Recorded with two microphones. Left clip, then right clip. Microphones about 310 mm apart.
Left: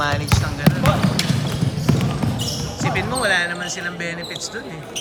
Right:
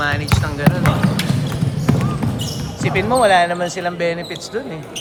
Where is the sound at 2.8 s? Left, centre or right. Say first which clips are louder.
Right 7 dB; centre.